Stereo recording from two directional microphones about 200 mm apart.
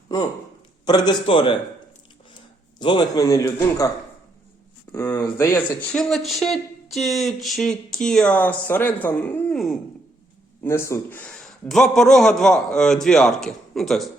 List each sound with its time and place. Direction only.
0.9 s a man's voice: 20° left (ahead or behind)
2.7 s a man's voice: 20° left (ahead or behind); by 14.1 s centre (ahead or behind)